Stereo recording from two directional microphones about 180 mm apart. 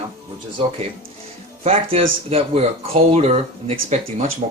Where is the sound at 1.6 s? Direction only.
35° right (ahead or behind).